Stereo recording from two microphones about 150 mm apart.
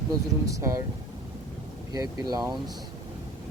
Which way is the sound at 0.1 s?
20° right (ahead or behind).